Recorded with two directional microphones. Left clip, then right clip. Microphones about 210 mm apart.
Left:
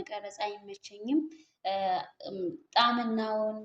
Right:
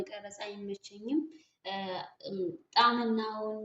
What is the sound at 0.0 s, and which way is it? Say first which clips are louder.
Speech: left 5 dB; 45° left (ahead or behind).